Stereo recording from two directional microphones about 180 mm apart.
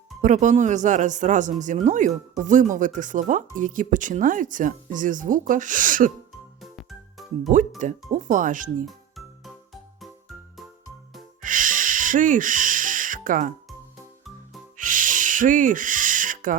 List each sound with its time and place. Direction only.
0.2 s speech: 45° right (ahead or behind)
6.6 s music: centre (ahead or behind)
8.1 s speech: 45° right (ahead or behind)
8.9 s music: centre (ahead or behind)
11.4 s music: 45° right (ahead or behind)
14.8 s owl: 50° right (ahead or behind)